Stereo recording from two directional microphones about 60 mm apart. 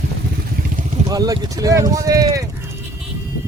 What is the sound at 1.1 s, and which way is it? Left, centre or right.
Speech, right.